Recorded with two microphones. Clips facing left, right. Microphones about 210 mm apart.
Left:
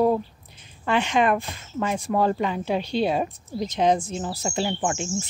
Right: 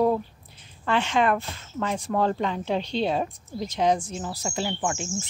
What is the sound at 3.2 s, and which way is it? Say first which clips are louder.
Speech: left 3 dB; 20° left (ahead or behind).